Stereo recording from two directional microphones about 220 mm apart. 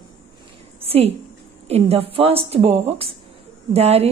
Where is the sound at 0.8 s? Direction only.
25° right (ahead or behind).